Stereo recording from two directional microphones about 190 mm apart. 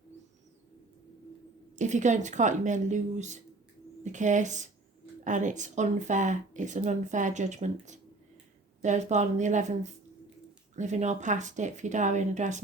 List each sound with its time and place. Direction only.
1.7 s speech: 40° right (ahead or behind)